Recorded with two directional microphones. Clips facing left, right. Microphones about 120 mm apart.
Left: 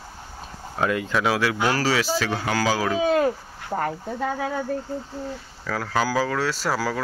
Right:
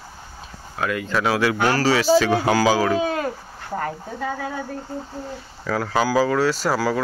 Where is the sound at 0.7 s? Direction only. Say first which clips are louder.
Left 1 dB; 25° left (ahead or behind).